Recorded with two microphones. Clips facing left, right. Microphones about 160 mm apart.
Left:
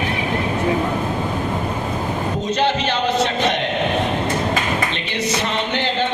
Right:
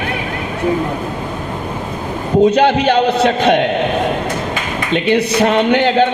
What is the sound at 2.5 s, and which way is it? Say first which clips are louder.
A man's voice: right 7 dB; 60° right (ahead or behind).